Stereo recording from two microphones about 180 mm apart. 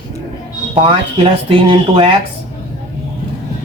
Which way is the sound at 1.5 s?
30° right (ahead or behind).